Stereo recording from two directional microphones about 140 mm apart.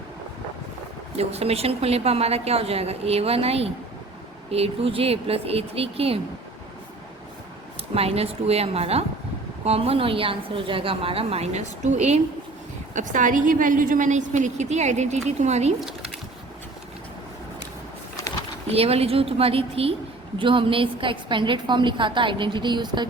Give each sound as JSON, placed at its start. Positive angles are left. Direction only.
{"t": 1.1, "sound": "a woman's voice", "side_deg": -50}
{"t": 7.9, "sound": "a woman's voice", "side_deg": -45}
{"t": 12.9, "sound": "a woman's voice", "side_deg": -65}
{"t": 18.7, "sound": "a woman's voice", "side_deg": -45}